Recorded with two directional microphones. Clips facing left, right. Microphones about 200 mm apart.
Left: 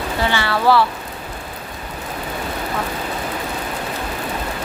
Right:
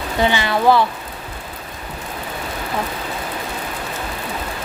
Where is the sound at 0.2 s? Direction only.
15° right (ahead or behind).